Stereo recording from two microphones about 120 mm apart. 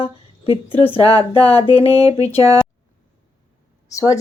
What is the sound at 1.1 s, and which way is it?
Speech, 55° left (ahead or behind).